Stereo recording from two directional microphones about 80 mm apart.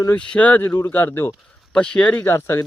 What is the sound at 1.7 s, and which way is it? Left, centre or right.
Speech, centre.